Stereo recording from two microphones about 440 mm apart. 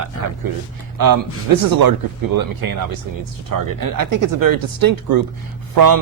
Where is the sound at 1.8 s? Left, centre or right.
Right.